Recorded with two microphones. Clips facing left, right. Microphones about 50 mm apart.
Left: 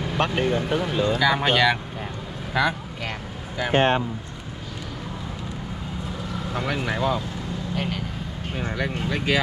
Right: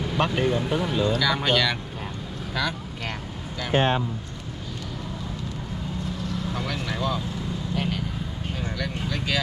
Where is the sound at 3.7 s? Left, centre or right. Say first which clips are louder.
Left 2 dB; left.